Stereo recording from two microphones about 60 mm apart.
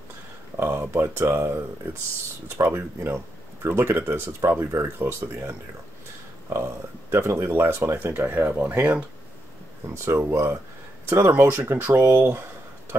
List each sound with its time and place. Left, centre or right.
0.6 s speech: right
2.5 s speech: right
9.8 s speech: right
11.1 s speech: right